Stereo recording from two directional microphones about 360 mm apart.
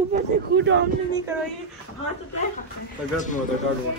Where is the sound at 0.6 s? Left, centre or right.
Right.